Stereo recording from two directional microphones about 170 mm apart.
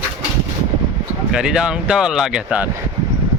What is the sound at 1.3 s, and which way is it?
Speech, 5° right (ahead or behind).